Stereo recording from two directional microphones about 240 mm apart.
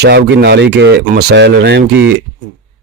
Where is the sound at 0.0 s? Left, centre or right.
Right.